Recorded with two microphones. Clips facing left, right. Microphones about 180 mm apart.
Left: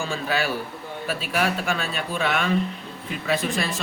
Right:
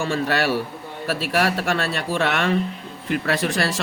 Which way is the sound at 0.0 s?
70° right (ahead or behind).